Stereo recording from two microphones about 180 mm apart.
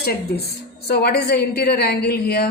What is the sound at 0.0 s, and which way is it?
A woman's voice, 60° left (ahead or behind).